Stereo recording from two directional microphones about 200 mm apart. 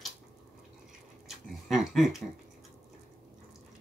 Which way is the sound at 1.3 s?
Centre (ahead or behind).